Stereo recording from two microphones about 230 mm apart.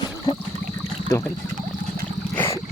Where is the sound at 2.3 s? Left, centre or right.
Centre.